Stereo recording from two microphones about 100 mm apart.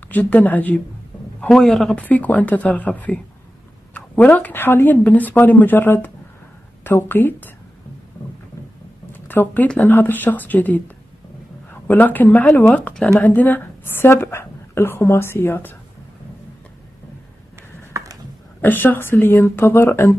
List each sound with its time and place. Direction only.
0.1 s speech: 15° left (ahead or behind)
1.4 s a man's voice: 5° left (ahead or behind)
2.0 s speech: 15° left (ahead or behind)
8.2 s boat: 20° left (ahead or behind)
9.1 s a woman's voice: 20° left (ahead or behind)
17.9 s a sound: 35° right (ahead or behind)
18.6 s speech: 20° left (ahead or behind)